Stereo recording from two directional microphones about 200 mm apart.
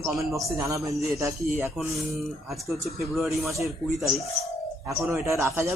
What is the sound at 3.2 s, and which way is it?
A woman's voice, centre (ahead or behind).